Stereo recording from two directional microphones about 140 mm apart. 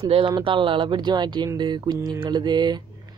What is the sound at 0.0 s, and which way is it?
Speech, 35° right (ahead or behind).